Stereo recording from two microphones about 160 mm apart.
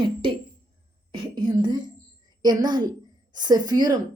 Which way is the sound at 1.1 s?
30° right (ahead or behind).